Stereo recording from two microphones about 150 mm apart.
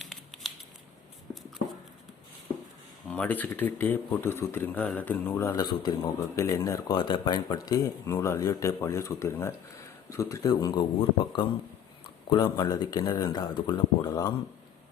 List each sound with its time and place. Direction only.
0.0 s scissors: centre (ahead or behind)
3.1 s speech: 10° left (ahead or behind)